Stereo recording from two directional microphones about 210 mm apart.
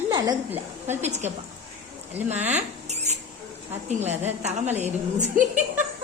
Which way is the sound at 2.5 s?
30° right (ahead or behind).